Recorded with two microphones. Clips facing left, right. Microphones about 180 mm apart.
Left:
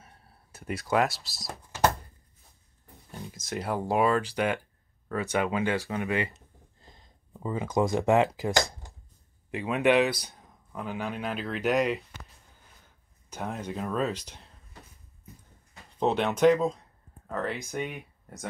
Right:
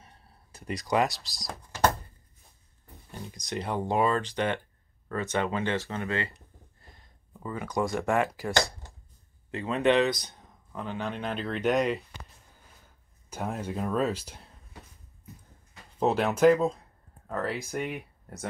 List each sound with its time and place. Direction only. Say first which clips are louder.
0.0 s a sound: even; 5° left (ahead or behind)
3.1 s speech: even; centre (ahead or behind); by 6.4 s 15° left (ahead or behind)
6.9 s a sound: left 3 dB; 20° left (ahead or behind)
9.5 s speech: left 1 dB; 10° left (ahead or behind)
13.3 s speech: right 1 dB; 5° right (ahead or behind)
16.0 s speech: right 1 dB; 5° right (ahead or behind)